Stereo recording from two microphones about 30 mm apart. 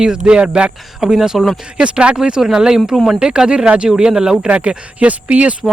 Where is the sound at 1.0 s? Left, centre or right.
Right.